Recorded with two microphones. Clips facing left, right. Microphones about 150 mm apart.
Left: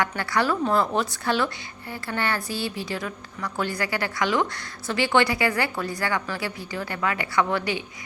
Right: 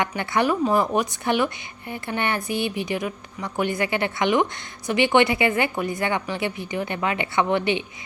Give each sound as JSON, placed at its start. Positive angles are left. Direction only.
{"t": 0.0, "sound": "a woman's voice", "side_deg": -20}